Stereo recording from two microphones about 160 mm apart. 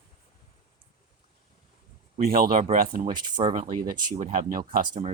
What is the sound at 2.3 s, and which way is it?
Speech, 65° right (ahead or behind).